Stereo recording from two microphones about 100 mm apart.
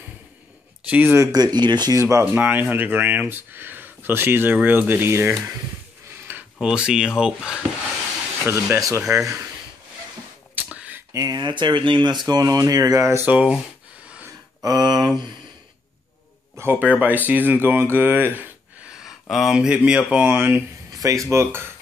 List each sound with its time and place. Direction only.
0.8 s speech: 15° right (ahead or behind)
1.1 s speech: 35° right (ahead or behind)
2.0 s speech: 30° right (ahead or behind)
2.3 s speech: 20° right (ahead or behind)
6.3 s a sound: 20° right (ahead or behind)
6.6 s speech: 10° right (ahead or behind)
8.5 s speech: 25° right (ahead or behind)
10.5 s a sound: 15° right (ahead or behind)
11.1 s speech: 40° right (ahead or behind); by 13.5 s 20° right (ahead or behind)
14.6 s speech: 40° right (ahead or behind)
16.8 s speech: 15° right (ahead or behind)
18.9 s speech: 5° right (ahead or behind)
21.0 s speech: 35° right (ahead or behind)